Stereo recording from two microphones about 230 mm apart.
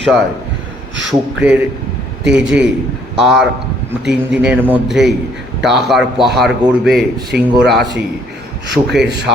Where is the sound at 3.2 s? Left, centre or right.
Centre.